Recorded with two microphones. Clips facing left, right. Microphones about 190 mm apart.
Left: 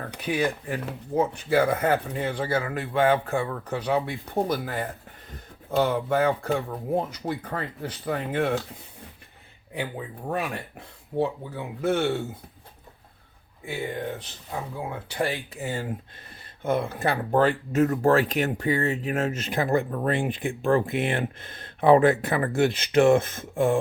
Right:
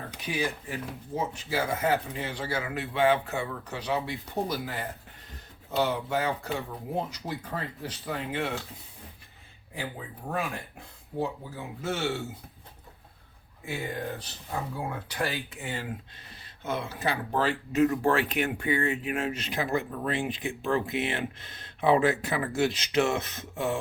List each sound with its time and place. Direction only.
0.1 s speech: 60° left (ahead or behind)
10.3 s speech: 70° left (ahead or behind)
15.1 s speech: 25° left (ahead or behind)
15.5 s speech: 40° left (ahead or behind)
16.4 s speech: 55° left (ahead or behind)